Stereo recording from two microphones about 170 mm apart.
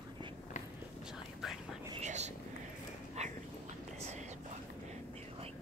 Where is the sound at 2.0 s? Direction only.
40° right (ahead or behind).